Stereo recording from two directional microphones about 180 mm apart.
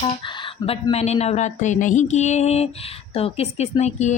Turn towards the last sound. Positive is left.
turn(degrees=40)  # may be behind; listen again after turning